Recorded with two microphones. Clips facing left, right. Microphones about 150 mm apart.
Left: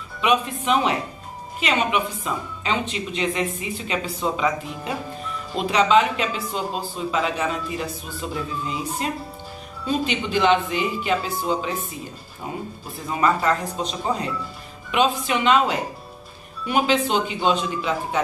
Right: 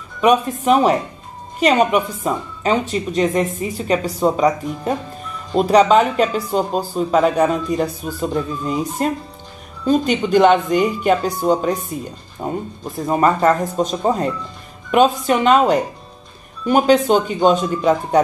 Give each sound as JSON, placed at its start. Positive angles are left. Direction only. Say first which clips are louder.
{"t": 0.2, "sound": "speech", "louder": "right 6 dB", "side_deg": -40}
{"t": 5.5, "sound": "speech", "louder": "right 6 dB", "side_deg": -40}